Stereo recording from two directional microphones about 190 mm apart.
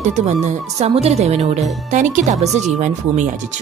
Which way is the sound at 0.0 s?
40° right (ahead or behind).